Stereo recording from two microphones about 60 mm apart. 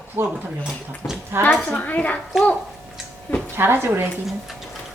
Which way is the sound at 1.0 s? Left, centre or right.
Left.